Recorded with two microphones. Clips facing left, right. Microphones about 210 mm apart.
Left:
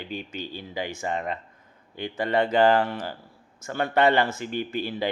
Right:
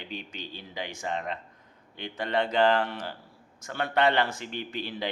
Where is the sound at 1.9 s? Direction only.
5° left (ahead or behind).